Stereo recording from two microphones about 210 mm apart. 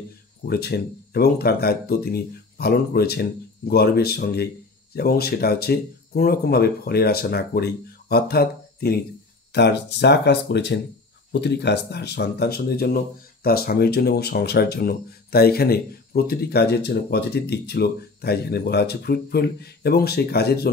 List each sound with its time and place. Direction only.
0.5 s speech: 50° left (ahead or behind)